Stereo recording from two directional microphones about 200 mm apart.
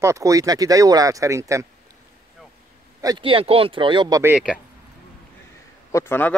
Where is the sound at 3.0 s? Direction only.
20° right (ahead or behind).